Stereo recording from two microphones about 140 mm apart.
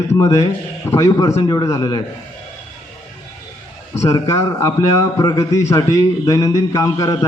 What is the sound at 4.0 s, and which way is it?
A man's voice, 25° left (ahead or behind).